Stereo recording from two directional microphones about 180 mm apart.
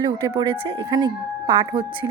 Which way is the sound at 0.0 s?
25° right (ahead or behind).